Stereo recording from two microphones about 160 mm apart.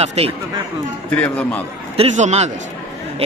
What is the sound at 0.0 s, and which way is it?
Speech, 40° right (ahead or behind).